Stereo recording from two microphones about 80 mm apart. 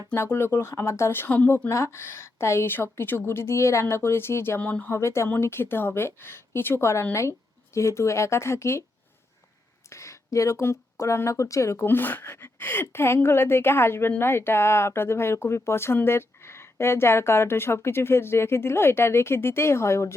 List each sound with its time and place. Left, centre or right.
0.1 s speech: left
4.6 s speech: centre
4.9 s speech: left
9.9 s speech: left